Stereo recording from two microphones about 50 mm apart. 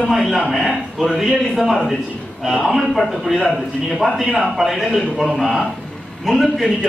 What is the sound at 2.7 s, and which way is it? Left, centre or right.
A man's voice, centre.